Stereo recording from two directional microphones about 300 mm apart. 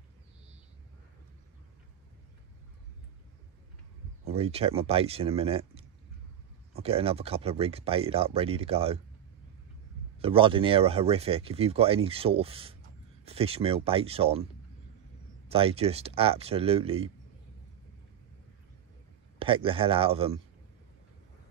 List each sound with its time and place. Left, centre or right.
4.2 s speech: centre
10.2 s speech: centre
15.5 s speech: centre
19.3 s speech: centre